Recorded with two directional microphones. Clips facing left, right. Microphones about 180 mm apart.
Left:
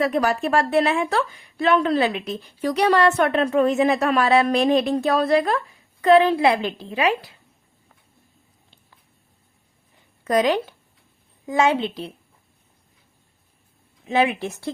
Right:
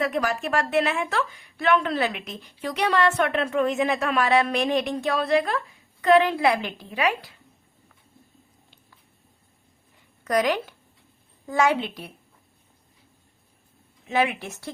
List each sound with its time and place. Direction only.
0.0 s a woman's voice: 35° left (ahead or behind)
10.2 s a woman's voice: 25° left (ahead or behind)
14.1 s a woman's voice: 30° left (ahead or behind)